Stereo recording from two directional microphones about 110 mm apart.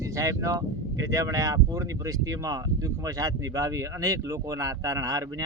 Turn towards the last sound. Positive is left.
turn(degrees=-30)  # may be behind; listen again after turning